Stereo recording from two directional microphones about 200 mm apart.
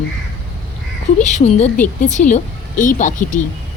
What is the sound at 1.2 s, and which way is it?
A woman's voice, 35° left (ahead or behind).